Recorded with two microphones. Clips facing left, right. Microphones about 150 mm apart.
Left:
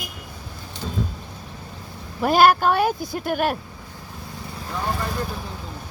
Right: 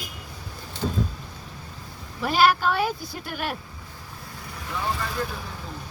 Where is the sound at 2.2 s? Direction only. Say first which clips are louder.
Left 5 dB; 45° left (ahead or behind).